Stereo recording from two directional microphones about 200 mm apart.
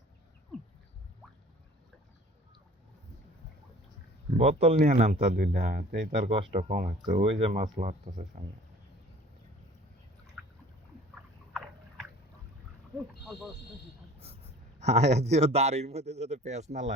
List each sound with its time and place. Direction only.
4.4 s speech: 30° right (ahead or behind)
5.3 s speech: 50° right (ahead or behind)
6.1 s speech: 35° right (ahead or behind)
11.1 s boat: 5° right (ahead or behind)
14.2 s a sound: 30° right (ahead or behind)
15.4 s speech: 30° right (ahead or behind)